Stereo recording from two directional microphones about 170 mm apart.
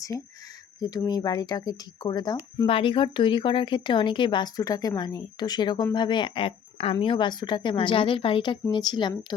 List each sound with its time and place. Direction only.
0.8 s speech: 20° left (ahead or behind)
2.6 s speech: 30° left (ahead or behind)